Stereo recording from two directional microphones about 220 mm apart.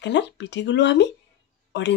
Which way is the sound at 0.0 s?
55° left (ahead or behind).